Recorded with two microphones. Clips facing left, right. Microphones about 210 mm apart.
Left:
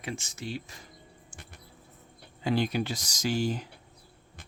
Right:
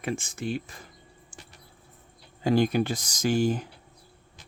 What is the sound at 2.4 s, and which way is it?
Speech, 45° right (ahead or behind).